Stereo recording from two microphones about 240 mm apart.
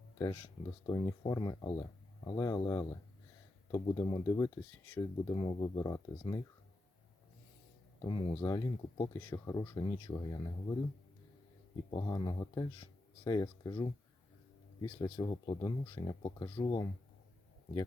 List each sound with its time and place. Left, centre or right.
0.2 s speech: centre
8.0 s speech: centre
11.9 s speech: centre